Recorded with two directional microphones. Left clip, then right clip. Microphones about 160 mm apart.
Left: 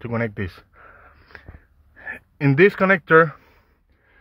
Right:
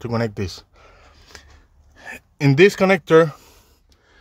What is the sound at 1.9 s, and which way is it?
A man's voice, 30° right (ahead or behind).